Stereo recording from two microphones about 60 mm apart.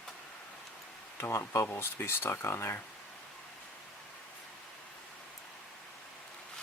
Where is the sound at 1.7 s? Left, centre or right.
Left.